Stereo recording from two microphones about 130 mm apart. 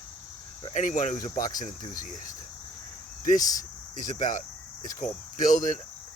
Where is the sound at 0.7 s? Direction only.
70° left (ahead or behind).